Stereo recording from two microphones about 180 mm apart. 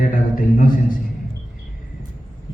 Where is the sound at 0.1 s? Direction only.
50° left (ahead or behind).